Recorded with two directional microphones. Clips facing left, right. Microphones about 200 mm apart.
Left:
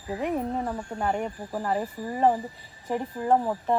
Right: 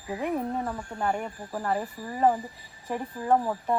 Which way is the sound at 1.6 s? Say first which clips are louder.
Left 1 dB; 20° left (ahead or behind).